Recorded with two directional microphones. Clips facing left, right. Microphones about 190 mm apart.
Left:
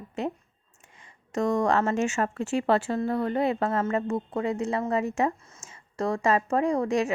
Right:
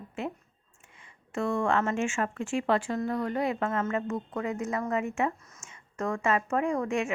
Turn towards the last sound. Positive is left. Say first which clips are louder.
# left 4 dB
turn(degrees=35)  # may be behind; listen again after turning